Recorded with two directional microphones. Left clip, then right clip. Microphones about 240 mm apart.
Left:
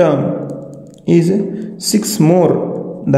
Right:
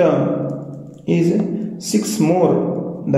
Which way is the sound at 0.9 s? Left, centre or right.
Left.